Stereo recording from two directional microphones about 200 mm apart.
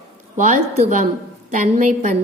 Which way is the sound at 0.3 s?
40° right (ahead or behind).